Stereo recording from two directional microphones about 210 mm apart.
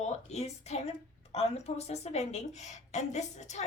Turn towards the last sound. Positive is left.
turn(degrees=35)  # may be behind; listen again after turning